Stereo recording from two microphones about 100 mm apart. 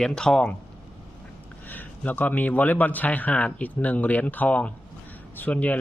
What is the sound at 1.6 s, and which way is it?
Speech, 20° left (ahead or behind).